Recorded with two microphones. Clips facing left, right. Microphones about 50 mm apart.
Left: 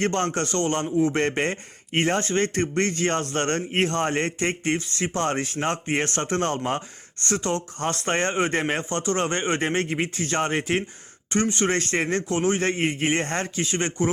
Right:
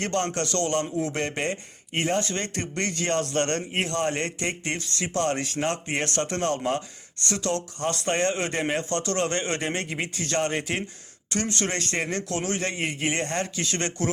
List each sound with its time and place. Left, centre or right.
0.0 s a man's voice: left